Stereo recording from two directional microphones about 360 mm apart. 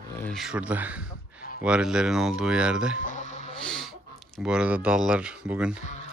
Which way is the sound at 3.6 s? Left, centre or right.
Centre.